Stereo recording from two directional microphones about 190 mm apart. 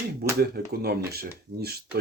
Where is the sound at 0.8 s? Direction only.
55° right (ahead or behind).